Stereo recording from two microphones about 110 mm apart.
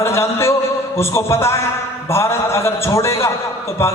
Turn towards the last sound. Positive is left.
turn(degrees=25)  # may be behind; listen again after turning